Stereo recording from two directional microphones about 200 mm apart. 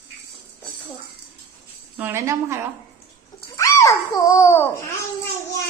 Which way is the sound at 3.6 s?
15° left (ahead or behind).